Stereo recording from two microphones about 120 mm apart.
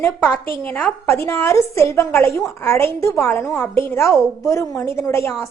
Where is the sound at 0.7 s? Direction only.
10° left (ahead or behind).